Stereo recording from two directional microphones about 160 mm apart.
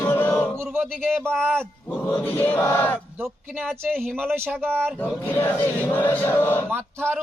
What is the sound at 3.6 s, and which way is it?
Speech, centre (ahead or behind).